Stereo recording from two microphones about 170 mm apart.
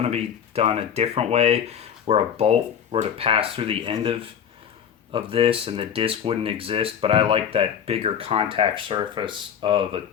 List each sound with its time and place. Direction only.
0.0 s speech: 40° right (ahead or behind)